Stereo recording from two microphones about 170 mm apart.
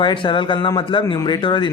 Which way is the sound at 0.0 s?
30° left (ahead or behind).